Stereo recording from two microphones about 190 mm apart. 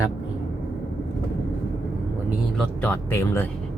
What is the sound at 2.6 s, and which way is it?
Speech, 10° left (ahead or behind).